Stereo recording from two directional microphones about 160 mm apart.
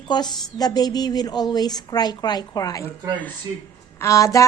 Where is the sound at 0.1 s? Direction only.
25° left (ahead or behind).